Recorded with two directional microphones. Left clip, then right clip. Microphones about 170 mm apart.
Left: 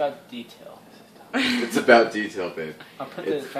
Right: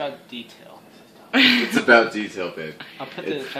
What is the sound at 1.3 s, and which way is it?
Speech, 30° right (ahead or behind).